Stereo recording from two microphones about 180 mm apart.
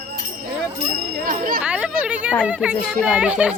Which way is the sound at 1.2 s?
50° right (ahead or behind).